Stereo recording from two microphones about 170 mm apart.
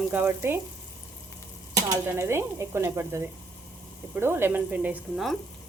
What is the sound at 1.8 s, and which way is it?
Stir, 15° right (ahead or behind).